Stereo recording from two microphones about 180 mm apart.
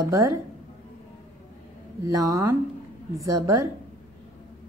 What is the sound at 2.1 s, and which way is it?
A woman's voice, 20° right (ahead or behind).